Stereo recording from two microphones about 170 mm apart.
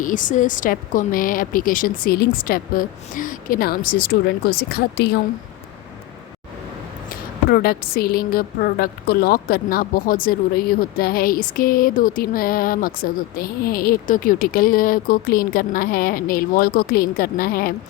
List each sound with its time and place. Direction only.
0.0 s speech: 50° left (ahead or behind); by 5.2 s 70° left (ahead or behind)
7.1 s speech: 60° left (ahead or behind)